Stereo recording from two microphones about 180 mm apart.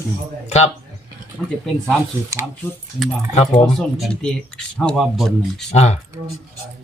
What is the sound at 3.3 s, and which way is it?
Speech, 30° left (ahead or behind).